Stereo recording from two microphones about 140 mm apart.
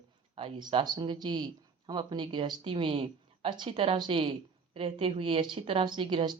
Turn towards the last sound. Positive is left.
turn(degrees=-40)  # may be behind; listen again after turning